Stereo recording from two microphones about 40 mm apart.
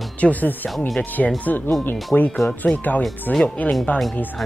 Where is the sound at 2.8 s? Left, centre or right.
Left.